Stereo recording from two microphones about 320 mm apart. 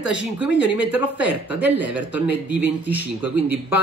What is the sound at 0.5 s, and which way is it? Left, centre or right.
Speech, centre.